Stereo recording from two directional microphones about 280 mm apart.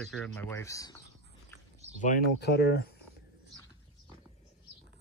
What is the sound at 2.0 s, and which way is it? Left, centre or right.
Speech, left.